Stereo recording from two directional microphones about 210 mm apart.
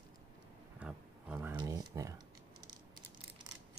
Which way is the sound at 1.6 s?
20° right (ahead or behind).